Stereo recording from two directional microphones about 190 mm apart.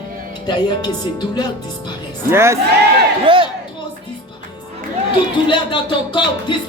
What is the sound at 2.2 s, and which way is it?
Speech, 15° right (ahead or behind).